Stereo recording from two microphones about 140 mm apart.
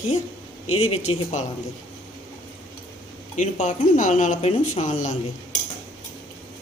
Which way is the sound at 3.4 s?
65° left (ahead or behind).